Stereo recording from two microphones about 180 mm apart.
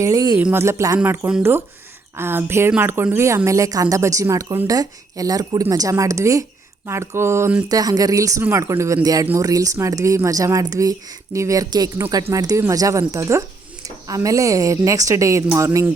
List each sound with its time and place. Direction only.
0.0 s a woman's voice: 20° right (ahead or behind)